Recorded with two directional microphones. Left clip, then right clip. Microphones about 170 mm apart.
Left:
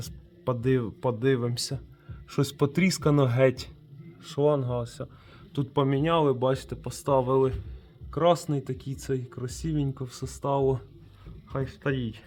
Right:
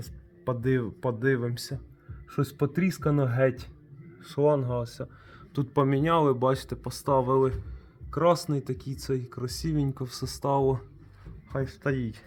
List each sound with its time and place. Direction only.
0.0 s speech: 15° left (ahead or behind)
4.2 s speech: 5° left (ahead or behind)